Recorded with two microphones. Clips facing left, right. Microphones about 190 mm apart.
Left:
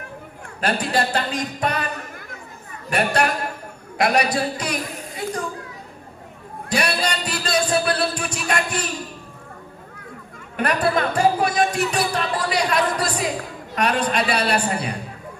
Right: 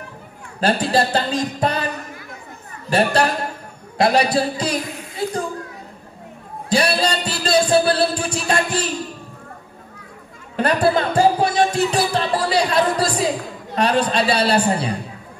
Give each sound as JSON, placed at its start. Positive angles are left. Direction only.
{"t": 0.6, "sound": "music", "side_deg": -30}
{"t": 2.9, "sound": "music", "side_deg": -30}
{"t": 4.0, "sound": "a woman's voice", "side_deg": -30}
{"t": 6.7, "sound": "music", "side_deg": -30}
{"t": 10.5, "sound": "music", "side_deg": -30}